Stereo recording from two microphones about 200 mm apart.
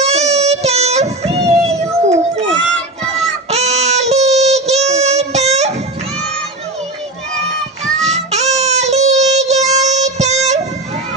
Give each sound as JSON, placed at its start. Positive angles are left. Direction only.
{"t": 0.0, "sound": "child singing", "side_deg": -35}
{"t": 3.4, "sound": "child singing", "side_deg": -35}
{"t": 7.8, "sound": "child singing", "side_deg": -35}